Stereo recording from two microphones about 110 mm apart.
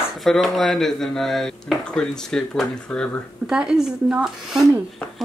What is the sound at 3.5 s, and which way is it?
Speech, 5° right (ahead or behind).